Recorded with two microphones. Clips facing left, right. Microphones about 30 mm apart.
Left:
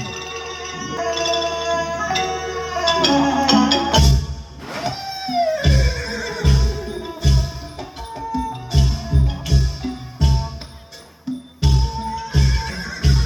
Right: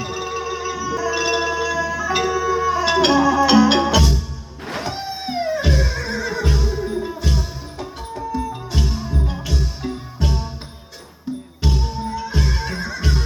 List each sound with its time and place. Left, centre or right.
0.0 s music: centre
1.1 s music: centre
2.8 s music: centre
3.1 s music: centre
3.4 s music: centre
12.3 s horse: centre
12.9 s neigh: centre